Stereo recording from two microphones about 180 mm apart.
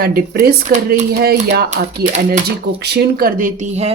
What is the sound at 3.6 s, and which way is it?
Speech, 35° right (ahead or behind).